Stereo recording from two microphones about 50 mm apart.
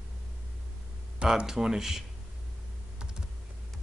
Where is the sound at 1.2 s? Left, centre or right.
Centre.